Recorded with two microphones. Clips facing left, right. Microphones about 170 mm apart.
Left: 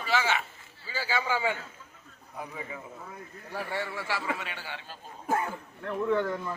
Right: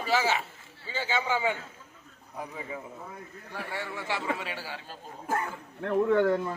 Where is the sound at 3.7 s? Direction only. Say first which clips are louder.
Right 1 dB; 20° right (ahead or behind); by 4.8 s 35° right (ahead or behind).